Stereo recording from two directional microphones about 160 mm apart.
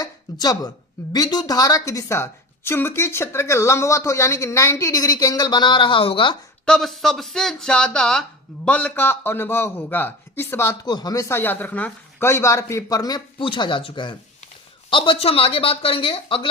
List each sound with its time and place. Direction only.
0.0 s a woman's voice: 25° left (ahead or behind)
6.7 s a man's voice: centre (ahead or behind); by 16.5 s 35° left (ahead or behind)